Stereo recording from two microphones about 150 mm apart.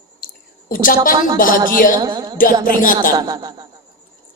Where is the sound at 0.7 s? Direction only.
65° left (ahead or behind).